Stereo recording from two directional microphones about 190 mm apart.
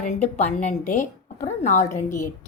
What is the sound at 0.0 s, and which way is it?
A woman's voice, 35° left (ahead or behind).